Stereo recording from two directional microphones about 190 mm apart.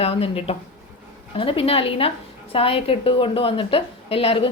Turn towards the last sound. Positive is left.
turn(degrees=30)  # may be behind; listen again after turning